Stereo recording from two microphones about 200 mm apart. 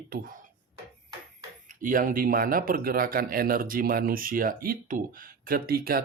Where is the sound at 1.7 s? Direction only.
40° right (ahead or behind).